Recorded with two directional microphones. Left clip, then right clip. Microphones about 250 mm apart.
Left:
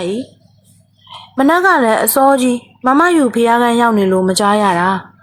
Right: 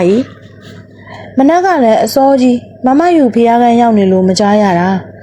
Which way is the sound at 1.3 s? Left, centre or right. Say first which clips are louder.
Right 2 dB; centre.